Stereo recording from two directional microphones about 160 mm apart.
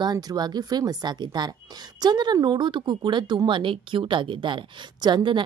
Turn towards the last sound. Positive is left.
turn(degrees=-30)  # may be behind; listen again after turning